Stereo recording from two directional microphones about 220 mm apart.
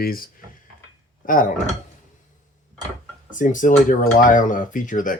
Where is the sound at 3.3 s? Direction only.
35° left (ahead or behind).